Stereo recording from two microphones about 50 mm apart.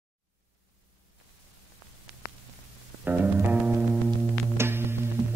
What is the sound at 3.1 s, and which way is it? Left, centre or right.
Music, right.